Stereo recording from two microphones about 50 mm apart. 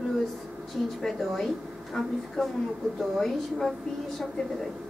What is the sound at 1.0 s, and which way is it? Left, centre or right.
Speech, centre.